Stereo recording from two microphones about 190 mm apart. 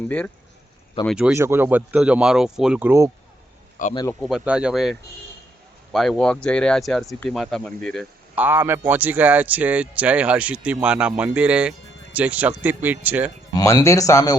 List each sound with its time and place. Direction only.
1.0 s a man's voice: 5° right (ahead or behind)
3.8 s a man's voice: 45° left (ahead or behind)
4.2 s speech: centre (ahead or behind)
8.4 s a man's voice: 10° right (ahead or behind)
13.5 s speech: 20° left (ahead or behind)